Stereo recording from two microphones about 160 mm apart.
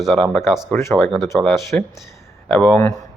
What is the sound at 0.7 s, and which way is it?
Speech, 15° left (ahead or behind).